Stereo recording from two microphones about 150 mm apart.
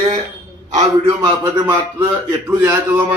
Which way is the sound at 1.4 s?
20° right (ahead or behind).